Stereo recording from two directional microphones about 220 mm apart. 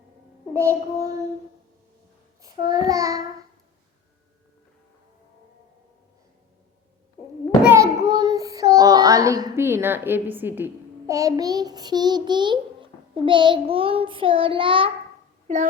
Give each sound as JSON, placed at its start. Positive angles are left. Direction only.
{"t": 0.5, "sound": "child singing", "side_deg": -10}
{"t": 2.6, "sound": "child singing", "side_deg": -15}
{"t": 7.6, "sound": "child singing", "side_deg": -10}